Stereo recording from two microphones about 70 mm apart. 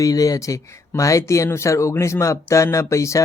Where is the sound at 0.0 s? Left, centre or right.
Left.